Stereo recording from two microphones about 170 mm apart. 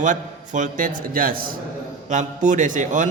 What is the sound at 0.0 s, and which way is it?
A man's voice, 45° right (ahead or behind).